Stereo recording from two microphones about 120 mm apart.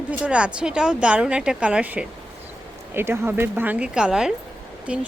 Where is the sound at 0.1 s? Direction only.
10° right (ahead or behind).